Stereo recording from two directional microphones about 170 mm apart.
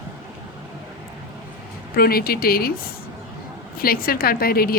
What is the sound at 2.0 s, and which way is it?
Speech, 60° left (ahead or behind).